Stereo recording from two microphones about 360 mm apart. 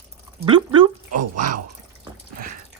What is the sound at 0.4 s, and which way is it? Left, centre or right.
Speech, centre.